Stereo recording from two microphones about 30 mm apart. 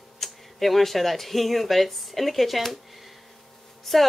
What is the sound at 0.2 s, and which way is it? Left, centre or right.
Speech, centre.